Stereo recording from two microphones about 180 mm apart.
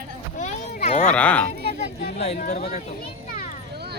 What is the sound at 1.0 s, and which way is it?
Speech, 5° left (ahead or behind).